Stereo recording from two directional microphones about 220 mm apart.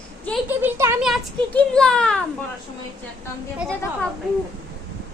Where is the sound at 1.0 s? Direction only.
Centre (ahead or behind).